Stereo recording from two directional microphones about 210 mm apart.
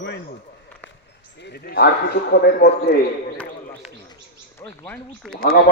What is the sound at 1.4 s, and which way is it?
A man's voice, 45° left (ahead or behind).